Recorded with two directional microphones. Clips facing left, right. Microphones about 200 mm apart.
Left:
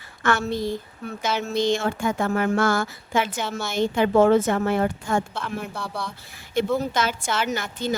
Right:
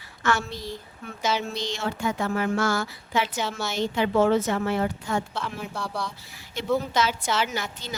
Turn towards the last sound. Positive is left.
turn(degrees=50)  # may be behind; listen again after turning